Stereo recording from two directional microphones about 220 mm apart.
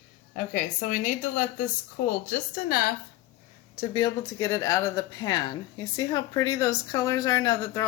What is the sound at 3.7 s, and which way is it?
Speech, 20° left (ahead or behind).